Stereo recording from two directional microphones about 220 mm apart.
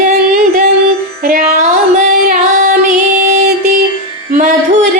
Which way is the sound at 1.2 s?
35° right (ahead or behind).